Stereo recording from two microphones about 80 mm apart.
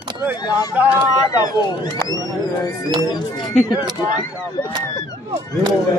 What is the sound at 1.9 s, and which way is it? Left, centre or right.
Speech, left.